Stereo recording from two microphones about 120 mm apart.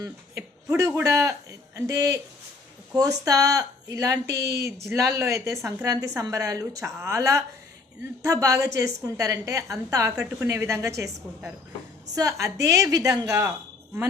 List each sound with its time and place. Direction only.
0.0 s a man's voice: 25° right (ahead or behind)
12.1 s speech: 25° right (ahead or behind)